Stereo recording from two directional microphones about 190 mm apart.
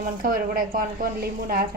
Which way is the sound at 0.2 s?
50° right (ahead or behind).